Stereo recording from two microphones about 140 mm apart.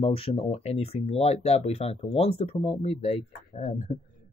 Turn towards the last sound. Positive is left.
turn(degrees=50)  # may be behind; listen again after turning